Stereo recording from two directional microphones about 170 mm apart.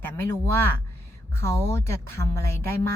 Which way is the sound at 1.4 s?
15° left (ahead or behind).